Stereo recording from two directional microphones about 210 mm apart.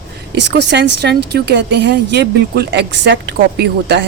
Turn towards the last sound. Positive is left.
turn(degrees=-50)  # may be behind; listen again after turning